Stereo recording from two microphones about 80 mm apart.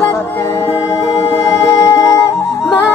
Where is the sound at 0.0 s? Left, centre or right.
Left.